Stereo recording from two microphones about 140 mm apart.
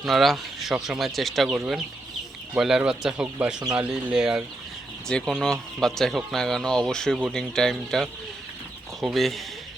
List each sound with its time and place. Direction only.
0.0 s speech: centre (ahead or behind)